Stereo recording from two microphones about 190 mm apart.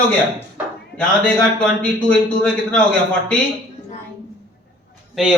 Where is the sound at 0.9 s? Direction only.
5° left (ahead or behind).